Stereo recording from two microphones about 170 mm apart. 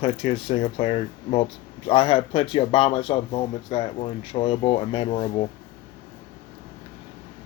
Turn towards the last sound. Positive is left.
turn(degrees=35)  # may be behind; listen again after turning